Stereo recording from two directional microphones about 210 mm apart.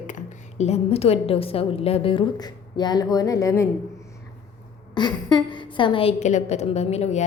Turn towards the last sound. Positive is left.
turn(degrees=30)  # may be behind; listen again after turning